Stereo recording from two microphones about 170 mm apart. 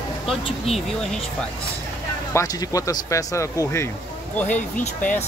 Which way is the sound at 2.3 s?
20° left (ahead or behind).